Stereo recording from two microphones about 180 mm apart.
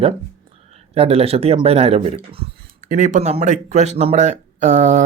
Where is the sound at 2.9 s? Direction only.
40° right (ahead or behind).